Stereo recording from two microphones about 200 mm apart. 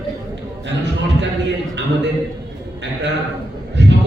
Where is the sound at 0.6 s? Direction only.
60° right (ahead or behind).